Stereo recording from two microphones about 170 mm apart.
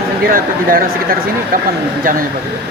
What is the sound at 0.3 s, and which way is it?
Speech, 55° right (ahead or behind).